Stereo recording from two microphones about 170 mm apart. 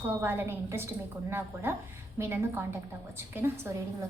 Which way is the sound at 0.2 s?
15° right (ahead or behind).